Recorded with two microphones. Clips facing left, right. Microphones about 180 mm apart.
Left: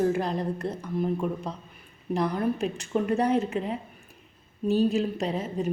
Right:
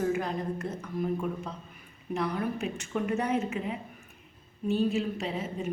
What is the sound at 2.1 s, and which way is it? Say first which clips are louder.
A woman's voice: left 4 dB; 35° left (ahead or behind).